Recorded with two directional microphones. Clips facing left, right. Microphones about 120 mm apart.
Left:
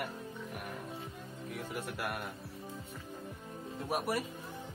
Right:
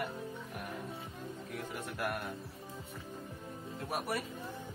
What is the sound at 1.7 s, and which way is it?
Speech, centre (ahead or behind).